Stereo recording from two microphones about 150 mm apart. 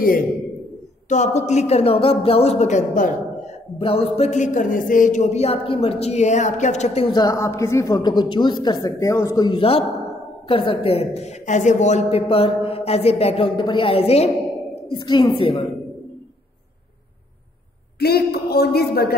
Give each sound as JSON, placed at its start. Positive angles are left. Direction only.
{"t": 1.0, "sound": "speech", "side_deg": 50}
{"t": 3.7, "sound": "speech", "side_deg": 40}
{"t": 7.2, "sound": "a woman's voice", "side_deg": 20}
{"t": 9.5, "sound": "a man's voice", "side_deg": 40}
{"t": 15.0, "sound": "a man's voice", "side_deg": 30}
{"t": 17.9, "sound": "a woman's voice", "side_deg": 90}